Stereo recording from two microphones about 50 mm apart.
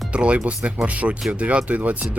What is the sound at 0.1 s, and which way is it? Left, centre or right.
Speech, right.